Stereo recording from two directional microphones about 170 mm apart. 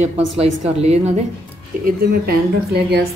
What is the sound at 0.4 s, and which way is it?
Speech, 40° right (ahead or behind).